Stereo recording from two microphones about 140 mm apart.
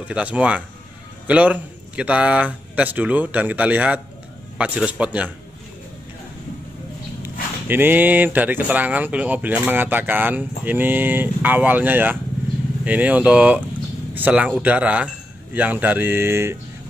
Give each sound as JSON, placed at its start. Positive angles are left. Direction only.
{"t": 0.1, "sound": "speech", "side_deg": -10}
{"t": 7.6, "sound": "speech", "side_deg": -15}